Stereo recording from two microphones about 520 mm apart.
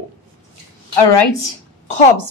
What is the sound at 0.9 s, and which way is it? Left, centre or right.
A woman's voice, left.